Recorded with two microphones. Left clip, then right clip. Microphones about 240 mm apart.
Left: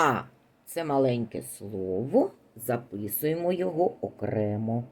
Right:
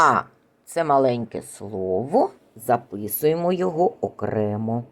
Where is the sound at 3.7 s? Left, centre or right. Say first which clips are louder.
Right 5 dB; right.